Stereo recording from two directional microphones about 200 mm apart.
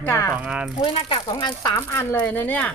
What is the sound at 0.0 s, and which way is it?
Speech, 10° left (ahead or behind).